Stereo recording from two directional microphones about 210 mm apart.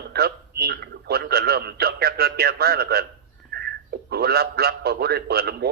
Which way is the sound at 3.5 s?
50° right (ahead or behind).